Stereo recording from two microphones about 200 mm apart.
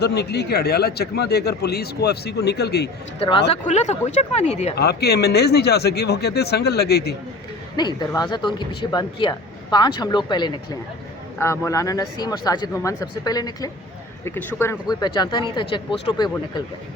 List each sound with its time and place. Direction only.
0.0 s a man's voice: 55° left (ahead or behind)
3.2 s speech: 25° left (ahead or behind)
4.8 s a man's voice: 55° left (ahead or behind)
7.8 s speech: 20° left (ahead or behind)